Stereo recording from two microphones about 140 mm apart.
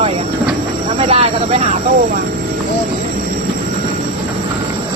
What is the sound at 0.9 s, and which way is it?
Vehicle, 45° right (ahead or behind).